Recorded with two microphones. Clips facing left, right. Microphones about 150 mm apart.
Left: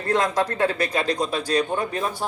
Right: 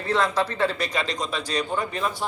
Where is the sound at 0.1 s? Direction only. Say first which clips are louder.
Left 2 dB; 45° left (ahead or behind).